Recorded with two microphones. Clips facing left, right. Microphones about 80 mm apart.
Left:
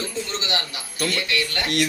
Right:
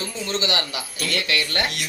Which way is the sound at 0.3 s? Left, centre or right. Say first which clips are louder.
Right 3 dB; right.